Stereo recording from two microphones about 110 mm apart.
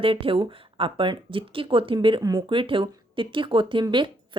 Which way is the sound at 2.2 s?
30° right (ahead or behind).